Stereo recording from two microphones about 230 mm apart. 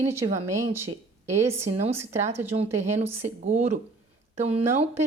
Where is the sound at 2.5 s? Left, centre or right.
Right.